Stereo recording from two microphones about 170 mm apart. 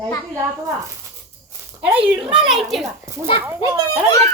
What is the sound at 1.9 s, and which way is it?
Speech, 30° right (ahead or behind).